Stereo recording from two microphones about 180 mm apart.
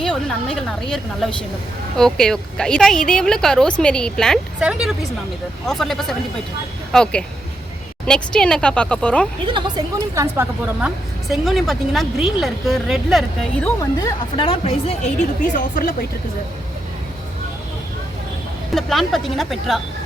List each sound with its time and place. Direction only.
0.0 s a woman's voice: 5° left (ahead or behind)
9.5 s a woman's voice: 25° right (ahead or behind); by 13.7 s centre (ahead or behind)
14.0 s a woman's voice: 30° left (ahead or behind)
15.5 s speech: 50° left (ahead or behind)
18.7 s a woman's voice: centre (ahead or behind)